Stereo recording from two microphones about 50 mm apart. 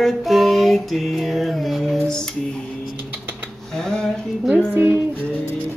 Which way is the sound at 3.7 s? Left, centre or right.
Centre.